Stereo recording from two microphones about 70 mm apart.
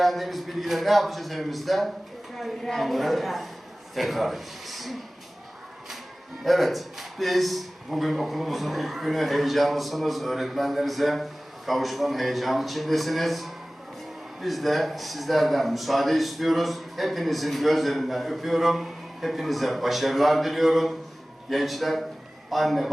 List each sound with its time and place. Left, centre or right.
0.0 s a man's voice: centre
6.4 s a man's voice: centre